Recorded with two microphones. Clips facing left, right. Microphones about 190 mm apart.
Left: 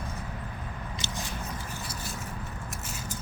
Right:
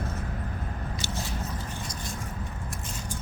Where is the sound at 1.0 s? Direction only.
15° left (ahead or behind).